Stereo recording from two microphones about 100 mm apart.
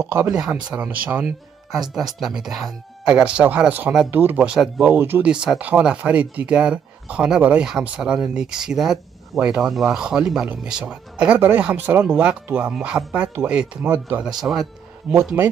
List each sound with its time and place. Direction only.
0.0 s speech: 25° right (ahead or behind)
1.8 s speech: 5° right (ahead or behind)
4.6 s speech: 5° right (ahead or behind)
4.9 s speech: 20° right (ahead or behind)
5.3 s speech: 10° right (ahead or behind)
14.4 s speech: centre (ahead or behind)